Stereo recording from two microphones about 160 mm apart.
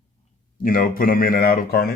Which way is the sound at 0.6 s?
60° left (ahead or behind).